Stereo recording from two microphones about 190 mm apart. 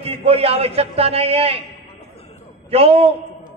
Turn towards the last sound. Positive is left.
turn(degrees=-30)  # may be behind; listen again after turning